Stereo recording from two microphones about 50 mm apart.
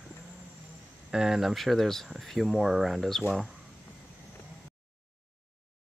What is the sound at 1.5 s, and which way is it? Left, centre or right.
Speech, centre.